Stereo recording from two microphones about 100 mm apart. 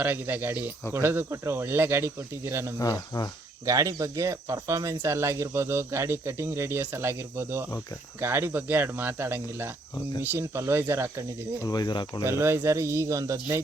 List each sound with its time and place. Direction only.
0.0 s speech: 20° right (ahead or behind)
2.7 s speech: 35° left (ahead or behind)
3.7 s speech: 35° right (ahead or behind)
11.6 s speech: 45° left (ahead or behind)
12.2 s speech: 25° right (ahead or behind)